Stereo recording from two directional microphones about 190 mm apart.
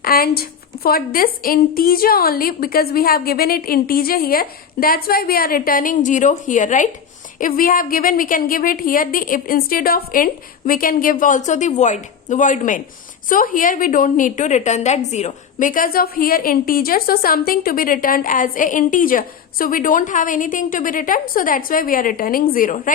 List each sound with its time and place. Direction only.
0.0 s a woman's voice: 50° left (ahead or behind)